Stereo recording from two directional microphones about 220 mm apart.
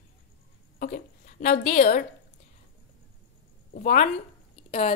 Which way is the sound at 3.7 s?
35° left (ahead or behind).